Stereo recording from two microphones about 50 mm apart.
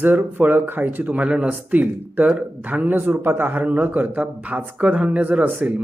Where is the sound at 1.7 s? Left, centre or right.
Right.